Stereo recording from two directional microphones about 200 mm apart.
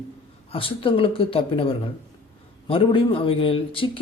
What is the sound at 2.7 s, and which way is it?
A man's voice, 25° left (ahead or behind).